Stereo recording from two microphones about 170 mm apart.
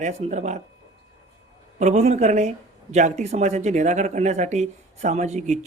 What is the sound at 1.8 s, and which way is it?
Speech, 40° right (ahead or behind).